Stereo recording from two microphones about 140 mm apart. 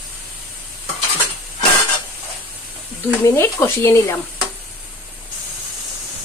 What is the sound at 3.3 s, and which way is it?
Speech, 20° left (ahead or behind).